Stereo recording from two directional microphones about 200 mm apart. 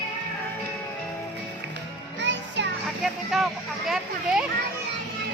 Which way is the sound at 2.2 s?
60° right (ahead or behind).